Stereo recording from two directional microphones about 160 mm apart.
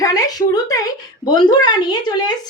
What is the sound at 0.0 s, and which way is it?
A woman's voice, 20° left (ahead or behind).